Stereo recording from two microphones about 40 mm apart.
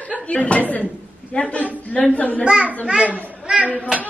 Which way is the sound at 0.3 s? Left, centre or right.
Left.